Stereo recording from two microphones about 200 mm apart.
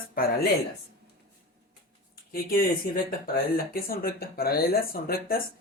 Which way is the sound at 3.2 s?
45° left (ahead or behind).